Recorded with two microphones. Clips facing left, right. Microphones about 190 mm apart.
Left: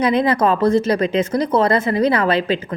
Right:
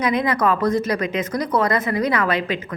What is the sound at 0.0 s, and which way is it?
Speech, 30° left (ahead or behind).